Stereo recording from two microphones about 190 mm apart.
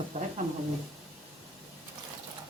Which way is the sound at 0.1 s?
35° right (ahead or behind).